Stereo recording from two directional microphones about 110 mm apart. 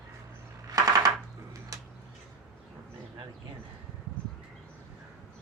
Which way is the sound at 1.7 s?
30° right (ahead or behind).